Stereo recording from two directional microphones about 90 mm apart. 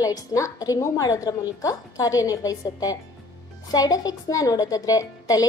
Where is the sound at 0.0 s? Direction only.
40° left (ahead or behind).